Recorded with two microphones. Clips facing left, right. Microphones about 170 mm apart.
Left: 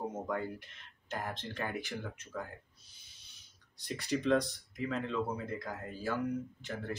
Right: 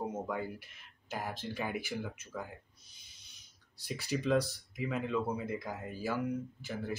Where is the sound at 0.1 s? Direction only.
5° right (ahead or behind).